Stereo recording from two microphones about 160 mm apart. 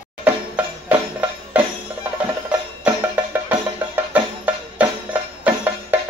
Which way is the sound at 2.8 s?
10° right (ahead or behind).